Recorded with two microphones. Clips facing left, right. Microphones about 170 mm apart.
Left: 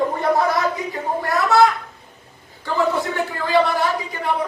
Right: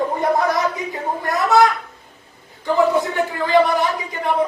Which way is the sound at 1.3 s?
20° right (ahead or behind).